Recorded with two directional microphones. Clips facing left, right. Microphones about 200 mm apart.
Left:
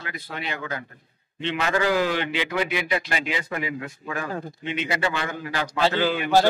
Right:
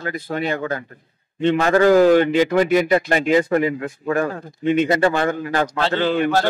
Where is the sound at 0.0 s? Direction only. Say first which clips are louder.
Right 10 dB; 45° right (ahead or behind).